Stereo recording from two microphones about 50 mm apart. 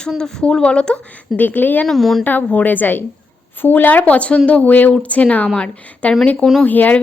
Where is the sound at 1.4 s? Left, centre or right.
Left.